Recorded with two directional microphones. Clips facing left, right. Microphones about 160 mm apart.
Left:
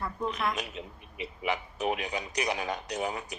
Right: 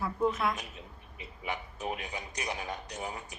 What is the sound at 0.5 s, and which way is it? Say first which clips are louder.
Speech: left 5 dB; 85° left.